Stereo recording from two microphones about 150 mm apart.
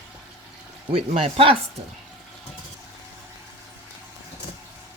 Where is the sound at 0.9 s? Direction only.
40° right (ahead or behind).